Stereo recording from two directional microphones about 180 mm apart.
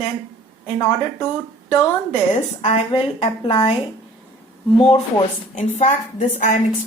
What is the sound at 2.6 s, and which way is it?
A woman's voice, 35° left (ahead or behind).